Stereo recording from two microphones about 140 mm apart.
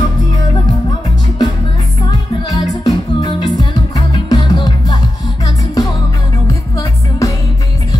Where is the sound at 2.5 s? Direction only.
25° left (ahead or behind).